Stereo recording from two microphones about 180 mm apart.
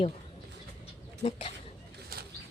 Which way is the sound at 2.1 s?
55° right (ahead or behind).